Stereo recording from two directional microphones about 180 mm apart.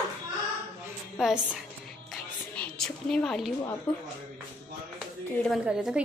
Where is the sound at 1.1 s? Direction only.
5° right (ahead or behind).